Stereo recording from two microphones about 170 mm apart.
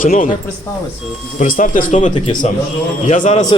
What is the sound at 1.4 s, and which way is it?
Speech, 50° left (ahead or behind).